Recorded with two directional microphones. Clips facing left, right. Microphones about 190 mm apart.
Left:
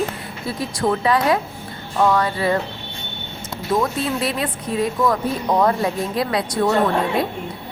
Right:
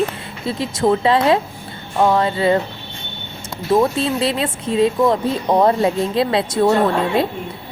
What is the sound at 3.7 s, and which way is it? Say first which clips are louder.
Speech: right 5 dB; 25° right (ahead or behind).